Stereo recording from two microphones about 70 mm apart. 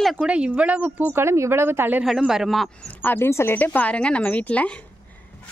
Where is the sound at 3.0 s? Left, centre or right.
Left.